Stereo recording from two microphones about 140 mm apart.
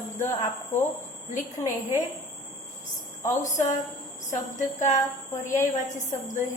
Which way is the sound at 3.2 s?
60° left (ahead or behind).